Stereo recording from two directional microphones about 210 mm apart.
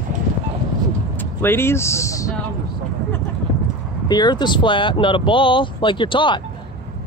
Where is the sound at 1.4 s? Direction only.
10° left (ahead or behind).